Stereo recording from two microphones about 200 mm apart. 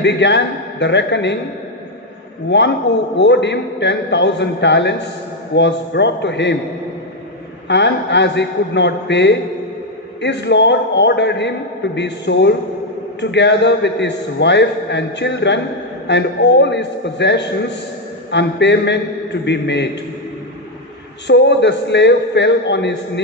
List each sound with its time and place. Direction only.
0.0 s a man's voice: 60° left (ahead or behind)
2.5 s a man's voice: 60° left (ahead or behind)
7.6 s a man's voice: 60° left (ahead or behind)
21.3 s a man's voice: 60° left (ahead or behind)